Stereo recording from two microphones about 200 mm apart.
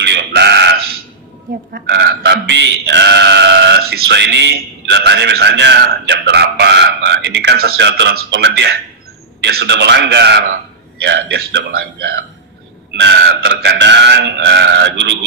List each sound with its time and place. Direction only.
0.0 s a sound: 55° right (ahead or behind)
1.7 s speech: 55° right (ahead or behind)
12.9 s speech: 60° right (ahead or behind)